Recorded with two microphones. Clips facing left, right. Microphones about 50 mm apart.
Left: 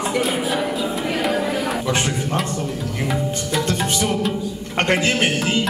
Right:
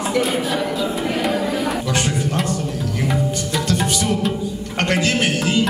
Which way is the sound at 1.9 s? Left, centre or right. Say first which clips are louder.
Right 1 dB; left.